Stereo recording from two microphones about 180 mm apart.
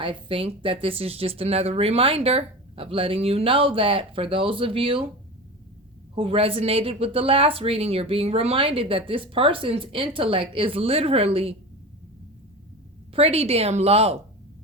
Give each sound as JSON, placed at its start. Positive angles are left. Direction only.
{"t": 0.0, "sound": "speech", "side_deg": -30}
{"t": 6.1, "sound": "speech", "side_deg": -30}
{"t": 13.1, "sound": "speech", "side_deg": -35}